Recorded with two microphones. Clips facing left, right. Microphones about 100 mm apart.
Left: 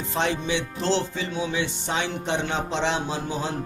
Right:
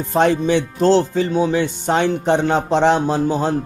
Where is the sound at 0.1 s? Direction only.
45° right (ahead or behind).